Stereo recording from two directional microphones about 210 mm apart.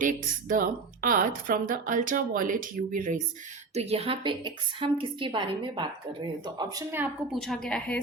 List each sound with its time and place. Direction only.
0.0 s speech: 40° right (ahead or behind)
3.8 s a woman's voice: 30° right (ahead or behind); by 7.3 s 10° right (ahead or behind)
7.3 s a woman's voice: centre (ahead or behind)